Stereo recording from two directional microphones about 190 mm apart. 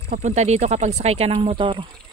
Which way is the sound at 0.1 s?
35° right (ahead or behind).